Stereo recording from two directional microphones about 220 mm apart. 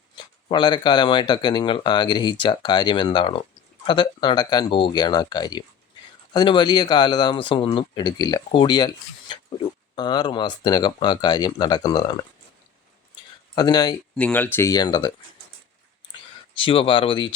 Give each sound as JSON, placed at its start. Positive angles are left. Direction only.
{"t": 0.4, "sound": "speech", "side_deg": 20}
{"t": 13.6, "sound": "speech", "side_deg": 20}
{"t": 14.2, "sound": "speech", "side_deg": 5}
{"t": 16.6, "sound": "speech", "side_deg": 25}